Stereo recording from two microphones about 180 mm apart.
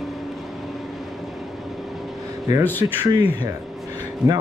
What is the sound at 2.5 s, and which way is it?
Speech, 20° right (ahead or behind).